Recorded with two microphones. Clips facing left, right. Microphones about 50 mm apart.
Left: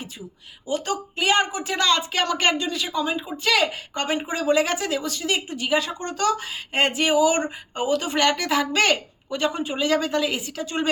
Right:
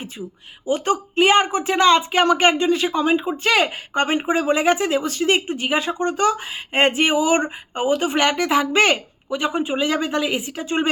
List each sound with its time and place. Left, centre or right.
0.7 s speech: right